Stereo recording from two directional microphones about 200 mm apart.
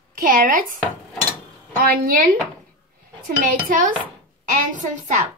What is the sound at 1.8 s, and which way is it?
Speech, 45° right (ahead or behind).